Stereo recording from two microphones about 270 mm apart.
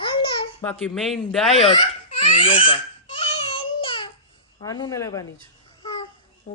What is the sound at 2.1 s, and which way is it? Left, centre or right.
Crying, centre.